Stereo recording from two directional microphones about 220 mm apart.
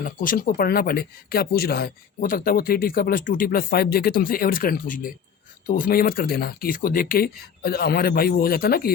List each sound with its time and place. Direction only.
0.0 s speech: 40° left (ahead or behind)